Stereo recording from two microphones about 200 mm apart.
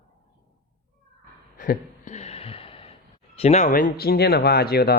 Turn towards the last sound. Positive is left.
turn(degrees=50)  # may be behind; listen again after turning